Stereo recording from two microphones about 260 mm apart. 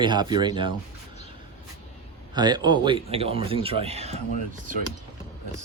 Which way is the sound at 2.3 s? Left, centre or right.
Centre.